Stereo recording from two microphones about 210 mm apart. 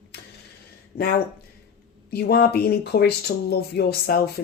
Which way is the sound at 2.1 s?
50° left (ahead or behind).